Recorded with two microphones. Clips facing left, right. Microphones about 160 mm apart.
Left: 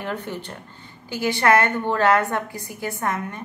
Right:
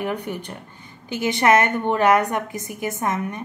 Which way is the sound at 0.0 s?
15° right (ahead or behind).